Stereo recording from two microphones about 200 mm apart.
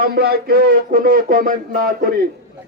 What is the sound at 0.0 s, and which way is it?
A man's voice, 50° right (ahead or behind).